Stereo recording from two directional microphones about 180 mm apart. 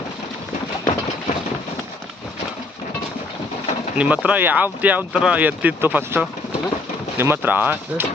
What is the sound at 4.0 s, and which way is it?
Speech, 5° right (ahead or behind).